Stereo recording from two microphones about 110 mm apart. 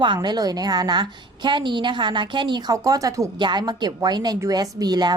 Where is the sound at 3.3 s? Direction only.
45° right (ahead or behind).